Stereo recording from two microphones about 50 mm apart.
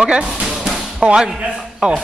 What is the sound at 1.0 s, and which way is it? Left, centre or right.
Speech, centre.